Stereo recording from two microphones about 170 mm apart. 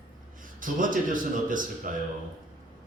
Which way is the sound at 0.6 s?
50° right (ahead or behind).